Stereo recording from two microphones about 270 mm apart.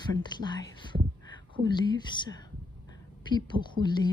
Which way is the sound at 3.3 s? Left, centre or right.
Centre.